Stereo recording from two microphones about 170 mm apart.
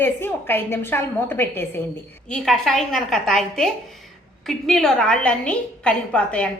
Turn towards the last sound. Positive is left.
turn(degrees=5)  # may be behind; listen again after turning